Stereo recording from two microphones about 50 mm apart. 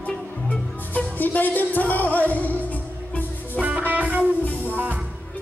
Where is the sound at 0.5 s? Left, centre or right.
Left.